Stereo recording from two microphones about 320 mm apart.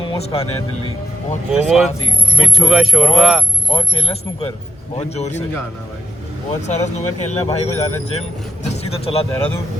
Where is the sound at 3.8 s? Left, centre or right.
Centre.